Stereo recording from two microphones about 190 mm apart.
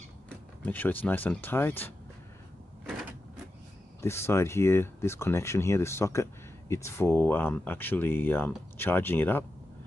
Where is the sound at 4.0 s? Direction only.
15° left (ahead or behind).